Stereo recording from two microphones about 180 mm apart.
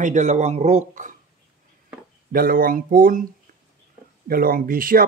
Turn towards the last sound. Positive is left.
turn(degrees=-50)  # may be behind; listen again after turning